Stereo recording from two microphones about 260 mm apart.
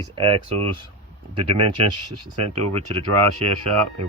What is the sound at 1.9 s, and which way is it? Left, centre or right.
Speech, right.